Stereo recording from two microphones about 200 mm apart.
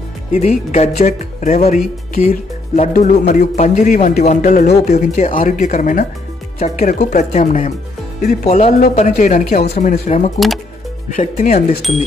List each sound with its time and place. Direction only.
0.3 s speech: 35° left (ahead or behind)